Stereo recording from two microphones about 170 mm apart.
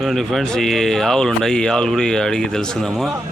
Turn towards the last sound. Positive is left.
turn(degrees=0)  # may be behind; listen again after turning